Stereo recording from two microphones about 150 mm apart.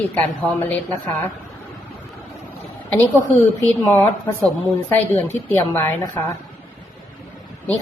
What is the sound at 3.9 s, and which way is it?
A woman's voice, 10° left (ahead or behind).